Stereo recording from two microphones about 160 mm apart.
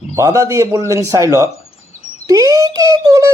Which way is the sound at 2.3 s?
20° right (ahead or behind).